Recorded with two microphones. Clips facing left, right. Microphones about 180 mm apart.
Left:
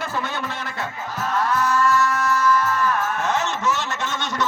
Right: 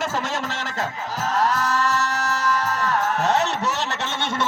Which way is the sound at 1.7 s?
80° right.